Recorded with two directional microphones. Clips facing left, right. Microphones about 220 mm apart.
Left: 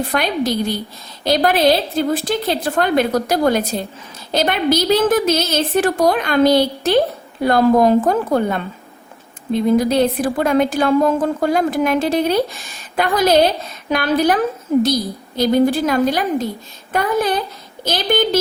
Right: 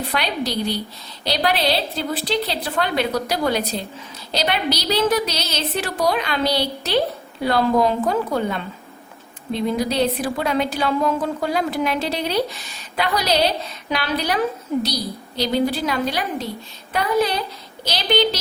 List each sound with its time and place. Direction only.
0.1 s a woman's voice: 50° left (ahead or behind)